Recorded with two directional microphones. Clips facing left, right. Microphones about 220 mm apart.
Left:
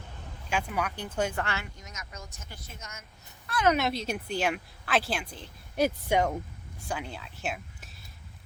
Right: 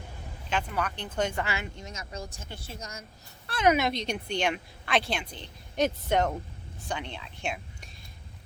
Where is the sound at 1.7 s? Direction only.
30° right (ahead or behind).